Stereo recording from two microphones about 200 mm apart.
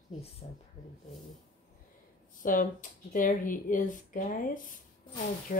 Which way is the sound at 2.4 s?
40° left (ahead or behind).